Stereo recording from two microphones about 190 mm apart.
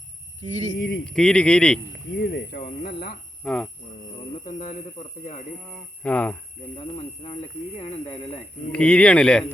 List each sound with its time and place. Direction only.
0.4 s speech: 35° right (ahead or behind)
0.8 s speech: 90° left
1.0 s speech: 5° left (ahead or behind)
2.1 s speech: 55° left (ahead or behind)
3.4 s speech: 5° left (ahead or behind)
4.4 s speech: 40° left (ahead or behind)
5.7 s speech: 5° left (ahead or behind)
6.7 s speech: 30° left (ahead or behind)
8.7 s speech: 5° left (ahead or behind)